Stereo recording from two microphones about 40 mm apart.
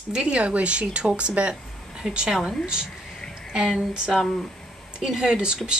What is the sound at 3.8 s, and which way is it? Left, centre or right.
Speech, right.